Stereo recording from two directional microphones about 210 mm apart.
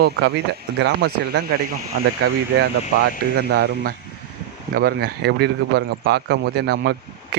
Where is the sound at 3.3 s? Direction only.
50° right (ahead or behind).